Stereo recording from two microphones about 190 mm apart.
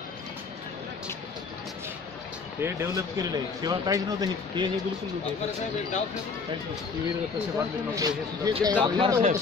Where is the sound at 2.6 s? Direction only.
15° right (ahead or behind).